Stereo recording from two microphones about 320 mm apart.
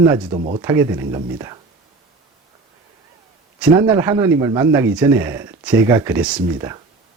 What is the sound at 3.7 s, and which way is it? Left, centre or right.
Speech, centre.